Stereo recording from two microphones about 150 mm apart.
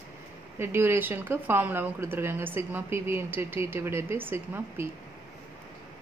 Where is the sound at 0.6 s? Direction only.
15° right (ahead or behind).